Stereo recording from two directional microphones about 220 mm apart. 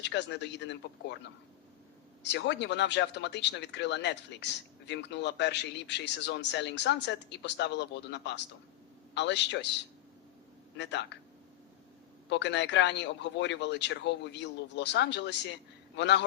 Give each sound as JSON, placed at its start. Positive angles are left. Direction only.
{"t": 0.0, "sound": "speech", "side_deg": 50}
{"t": 2.2, "sound": "speech", "side_deg": 55}
{"t": 10.8, "sound": "speech", "side_deg": 50}
{"t": 12.3, "sound": "speech", "side_deg": 50}